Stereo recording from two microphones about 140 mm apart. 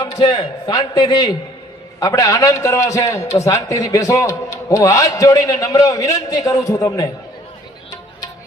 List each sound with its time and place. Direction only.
0.0 s a man's voice: 30° left (ahead or behind)